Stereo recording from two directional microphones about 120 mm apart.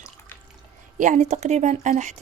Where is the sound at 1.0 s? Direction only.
90° right.